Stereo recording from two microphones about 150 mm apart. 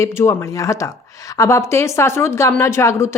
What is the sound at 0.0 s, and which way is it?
Speech, 20° left (ahead or behind).